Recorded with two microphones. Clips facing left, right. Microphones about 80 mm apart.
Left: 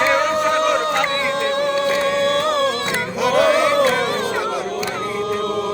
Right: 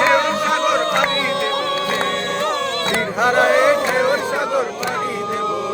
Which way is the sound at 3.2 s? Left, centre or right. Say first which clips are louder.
Right 1 dB; right.